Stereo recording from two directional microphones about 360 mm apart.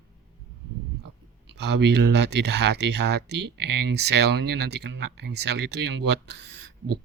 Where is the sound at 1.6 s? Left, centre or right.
Right.